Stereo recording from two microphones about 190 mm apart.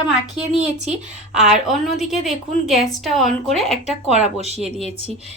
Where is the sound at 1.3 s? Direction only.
Centre (ahead or behind).